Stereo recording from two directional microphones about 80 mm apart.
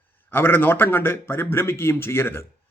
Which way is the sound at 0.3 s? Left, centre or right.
Left.